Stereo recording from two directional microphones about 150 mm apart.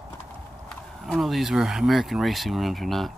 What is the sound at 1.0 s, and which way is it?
Speech, centre (ahead or behind).